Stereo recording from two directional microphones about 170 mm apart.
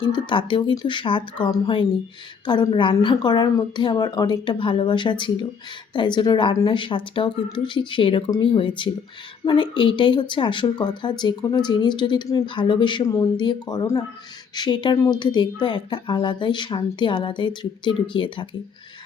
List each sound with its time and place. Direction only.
0.0 s speech: 30° left (ahead or behind)